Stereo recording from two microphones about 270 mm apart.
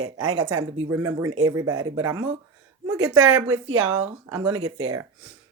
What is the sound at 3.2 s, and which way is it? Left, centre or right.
Speech, right.